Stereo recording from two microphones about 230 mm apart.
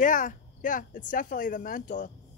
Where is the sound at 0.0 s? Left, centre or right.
Left.